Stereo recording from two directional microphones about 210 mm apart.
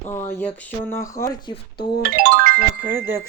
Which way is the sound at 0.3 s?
10° left (ahead or behind).